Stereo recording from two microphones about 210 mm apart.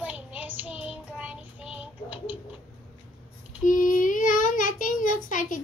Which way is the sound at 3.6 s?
40° left (ahead or behind).